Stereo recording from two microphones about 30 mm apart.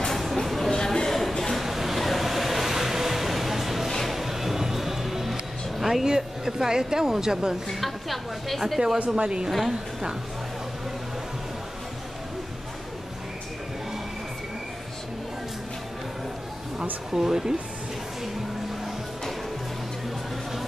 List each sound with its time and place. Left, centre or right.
0.1 s a sound: centre
0.7 s a sound: centre
1.6 s vehicle: centre
4.1 s music: centre
6.0 s speech: right
7.8 s a woman's voice: centre
8.5 s speech: centre
9.2 s speech: right
9.5 s a woman's voice: centre
17.1 s speech: centre